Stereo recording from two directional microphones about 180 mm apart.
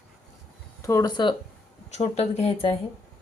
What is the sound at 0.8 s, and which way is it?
Speech, 15° left (ahead or behind).